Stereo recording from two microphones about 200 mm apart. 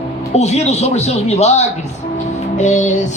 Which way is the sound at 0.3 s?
35° left (ahead or behind).